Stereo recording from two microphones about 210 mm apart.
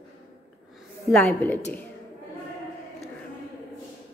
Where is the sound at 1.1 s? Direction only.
5° left (ahead or behind).